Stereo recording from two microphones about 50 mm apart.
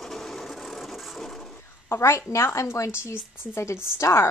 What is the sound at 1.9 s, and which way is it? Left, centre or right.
A woman's voice, left.